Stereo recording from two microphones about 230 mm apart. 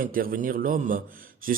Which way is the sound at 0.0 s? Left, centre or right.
Right.